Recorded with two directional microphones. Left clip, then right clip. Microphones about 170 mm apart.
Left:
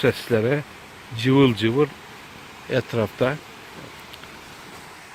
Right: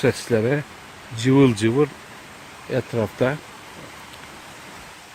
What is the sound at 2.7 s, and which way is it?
Speech, centre (ahead or behind).